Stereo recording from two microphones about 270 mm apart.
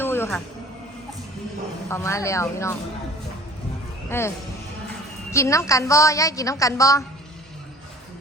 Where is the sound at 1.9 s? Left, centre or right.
Centre.